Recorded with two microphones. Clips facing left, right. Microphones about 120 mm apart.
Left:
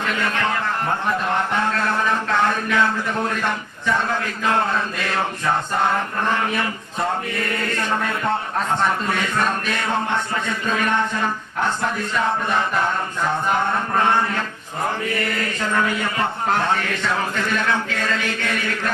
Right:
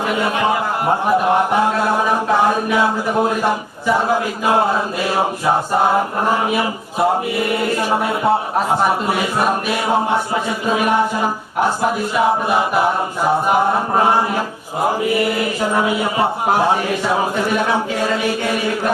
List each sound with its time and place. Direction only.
0.1 s a man's voice: 15° right (ahead or behind)